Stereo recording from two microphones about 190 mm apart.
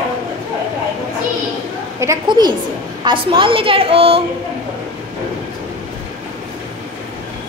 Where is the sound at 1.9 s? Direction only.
20° right (ahead or behind).